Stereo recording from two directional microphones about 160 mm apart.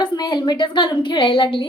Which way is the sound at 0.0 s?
30° left (ahead or behind).